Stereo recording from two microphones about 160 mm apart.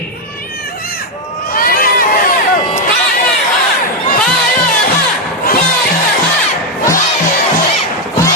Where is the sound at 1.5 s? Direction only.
65° left (ahead or behind).